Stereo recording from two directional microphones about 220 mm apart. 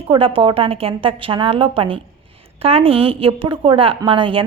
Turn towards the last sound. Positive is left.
turn(degrees=-25)  # may be behind; listen again after turning